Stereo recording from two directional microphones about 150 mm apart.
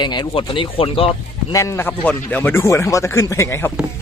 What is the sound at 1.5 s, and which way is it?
Speech, 15° left (ahead or behind).